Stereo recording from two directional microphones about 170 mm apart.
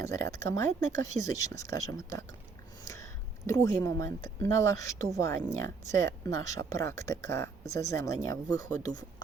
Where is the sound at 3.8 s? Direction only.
20° left (ahead or behind).